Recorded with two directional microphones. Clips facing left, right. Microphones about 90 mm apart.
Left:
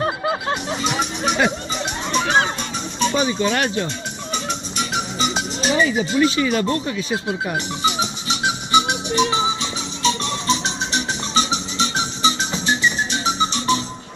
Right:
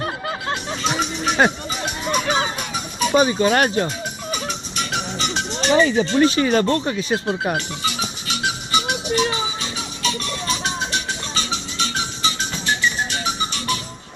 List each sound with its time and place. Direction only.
0.3 s music: 5° left (ahead or behind)
3.2 s speech: 45° right (ahead or behind)
4.3 s music: centre (ahead or behind)
5.7 s speech: 45° right (ahead or behind)
7.5 s music: 20° left (ahead or behind)